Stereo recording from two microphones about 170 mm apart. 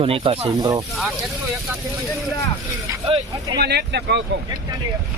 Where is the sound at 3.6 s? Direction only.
70° right (ahead or behind).